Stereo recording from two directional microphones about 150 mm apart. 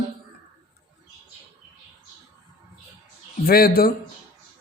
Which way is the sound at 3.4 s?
90° left.